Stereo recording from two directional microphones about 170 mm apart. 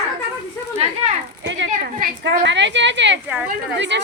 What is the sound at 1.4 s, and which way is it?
Speech, 90° right.